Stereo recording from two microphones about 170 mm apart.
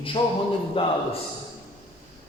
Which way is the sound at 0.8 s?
30° left (ahead or behind).